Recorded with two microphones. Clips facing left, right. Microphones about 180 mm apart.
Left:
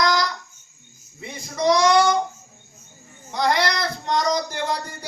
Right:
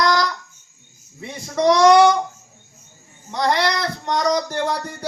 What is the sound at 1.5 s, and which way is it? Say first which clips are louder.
Child singing: right 5 dB; 65° right (ahead or behind).